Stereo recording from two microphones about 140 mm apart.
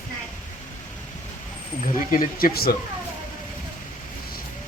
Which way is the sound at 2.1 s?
90° left.